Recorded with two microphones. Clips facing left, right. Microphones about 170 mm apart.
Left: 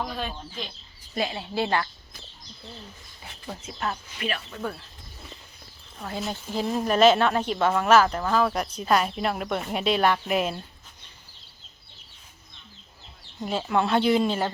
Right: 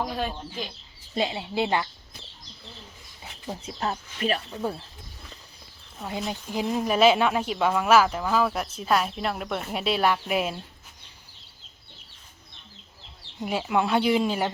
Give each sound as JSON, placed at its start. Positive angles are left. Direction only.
{"t": 0.0, "sound": "speech", "side_deg": -5}
{"t": 1.1, "sound": "speech", "side_deg": -20}
{"t": 3.4, "sound": "speech", "side_deg": -20}
{"t": 4.2, "sound": "speech", "side_deg": -40}
{"t": 4.5, "sound": "speech", "side_deg": -25}
{"t": 6.0, "sound": "speech", "side_deg": -15}
{"t": 13.4, "sound": "speech", "side_deg": -15}